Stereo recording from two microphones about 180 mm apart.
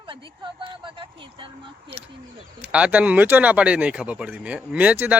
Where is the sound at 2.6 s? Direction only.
5° right (ahead or behind).